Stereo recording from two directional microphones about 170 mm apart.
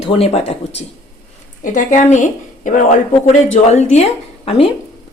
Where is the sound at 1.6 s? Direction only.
50° left (ahead or behind).